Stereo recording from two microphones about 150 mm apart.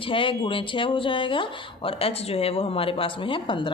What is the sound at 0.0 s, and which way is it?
Speech, 35° left (ahead or behind).